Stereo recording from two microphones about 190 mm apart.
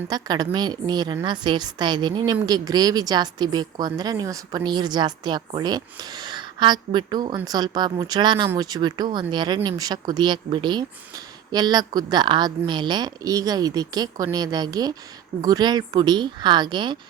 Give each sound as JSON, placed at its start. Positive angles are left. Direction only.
{"t": 0.1, "sound": "a woman's voice", "side_deg": -20}